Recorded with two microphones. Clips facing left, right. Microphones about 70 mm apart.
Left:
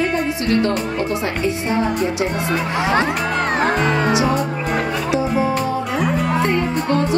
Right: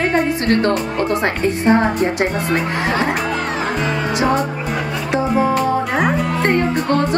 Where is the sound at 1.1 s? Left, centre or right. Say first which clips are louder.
Right 3 dB; right.